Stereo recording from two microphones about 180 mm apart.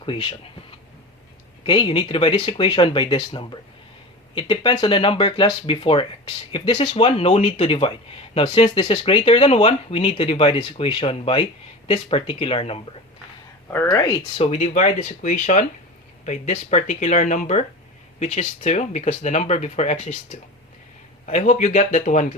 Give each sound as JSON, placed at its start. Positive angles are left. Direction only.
{"t": 0.0, "sound": "speech", "side_deg": 30}
{"t": 1.6, "sound": "speech", "side_deg": 30}
{"t": 13.7, "sound": "speech", "side_deg": 10}
{"t": 14.1, "sound": "speech", "side_deg": 35}
{"t": 21.2, "sound": "speech", "side_deg": 40}